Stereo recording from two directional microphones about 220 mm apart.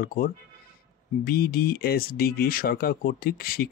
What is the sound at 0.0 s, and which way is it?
Speech, 40° left (ahead or behind).